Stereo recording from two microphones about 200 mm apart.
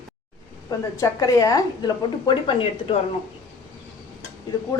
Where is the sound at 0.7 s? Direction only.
15° left (ahead or behind).